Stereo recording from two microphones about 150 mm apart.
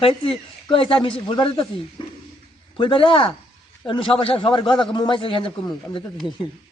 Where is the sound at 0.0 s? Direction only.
35° left (ahead or behind).